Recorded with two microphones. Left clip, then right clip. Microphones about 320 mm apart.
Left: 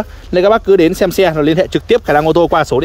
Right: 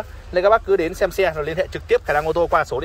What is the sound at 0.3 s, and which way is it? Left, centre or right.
Speech, left.